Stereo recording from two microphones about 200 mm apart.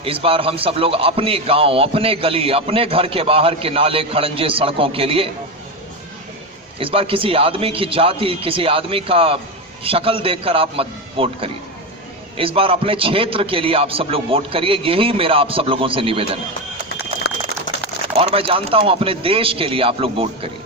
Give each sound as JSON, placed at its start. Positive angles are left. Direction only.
{"t": 0.0, "sound": "a man's voice", "side_deg": -25}
{"t": 6.7, "sound": "a man's voice", "side_deg": -25}
{"t": 18.2, "sound": "a man's voice", "side_deg": -30}